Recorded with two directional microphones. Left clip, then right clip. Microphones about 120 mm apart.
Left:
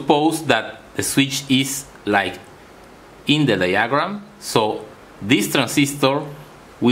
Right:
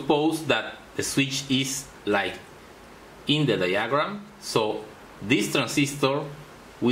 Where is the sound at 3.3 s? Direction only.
45° left (ahead or behind).